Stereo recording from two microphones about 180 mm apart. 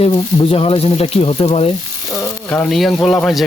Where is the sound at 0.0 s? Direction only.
30° left (ahead or behind).